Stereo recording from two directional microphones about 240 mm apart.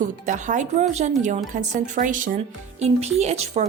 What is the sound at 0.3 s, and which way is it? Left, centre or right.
Speech, right.